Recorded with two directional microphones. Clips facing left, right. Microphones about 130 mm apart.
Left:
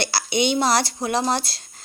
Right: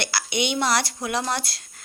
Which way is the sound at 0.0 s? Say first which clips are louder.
Left 4 dB; 35° left (ahead or behind).